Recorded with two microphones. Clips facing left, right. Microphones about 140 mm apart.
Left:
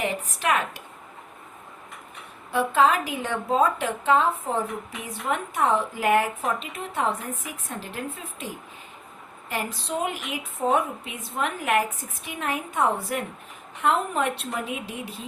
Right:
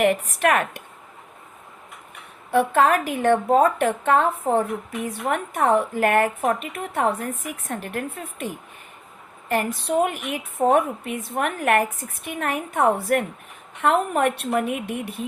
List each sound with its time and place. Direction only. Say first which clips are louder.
0.0 s speech: right 8 dB; 60° right (ahead or behind)
2.5 s speech: right 3 dB; 55° right (ahead or behind)